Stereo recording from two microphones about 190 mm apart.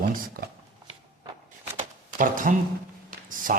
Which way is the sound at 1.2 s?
10° right (ahead or behind).